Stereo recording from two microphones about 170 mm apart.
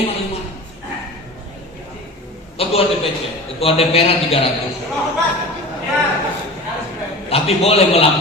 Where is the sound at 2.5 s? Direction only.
35° left (ahead or behind).